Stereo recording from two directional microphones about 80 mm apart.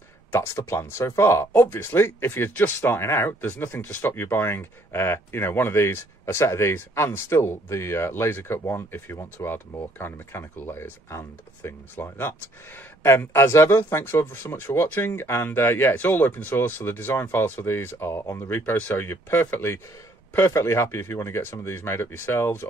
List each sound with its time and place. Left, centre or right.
0.3 s speech: left